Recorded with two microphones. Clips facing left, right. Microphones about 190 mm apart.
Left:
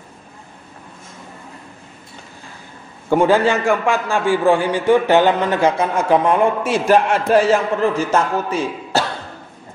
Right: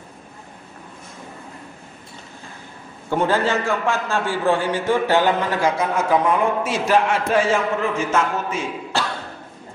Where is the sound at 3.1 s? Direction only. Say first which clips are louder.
Left 5 dB; 15° left (ahead or behind).